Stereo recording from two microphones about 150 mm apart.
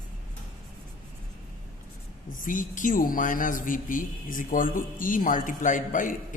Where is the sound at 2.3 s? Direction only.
65° left (ahead or behind).